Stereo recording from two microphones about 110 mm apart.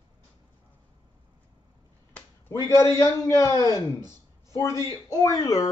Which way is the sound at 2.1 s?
10° left (ahead or behind).